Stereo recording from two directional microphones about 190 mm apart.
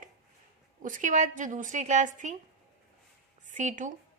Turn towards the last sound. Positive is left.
turn(degrees=-40)  # may be behind; listen again after turning